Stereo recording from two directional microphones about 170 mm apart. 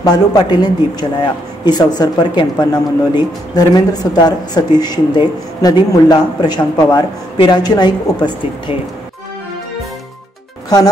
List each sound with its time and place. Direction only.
0.0 s speech: 25° left (ahead or behind)